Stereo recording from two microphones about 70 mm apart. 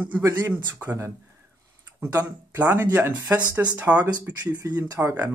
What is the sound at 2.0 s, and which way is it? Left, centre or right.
Speech, right.